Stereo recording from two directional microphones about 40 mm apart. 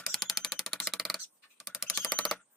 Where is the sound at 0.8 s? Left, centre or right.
Centre.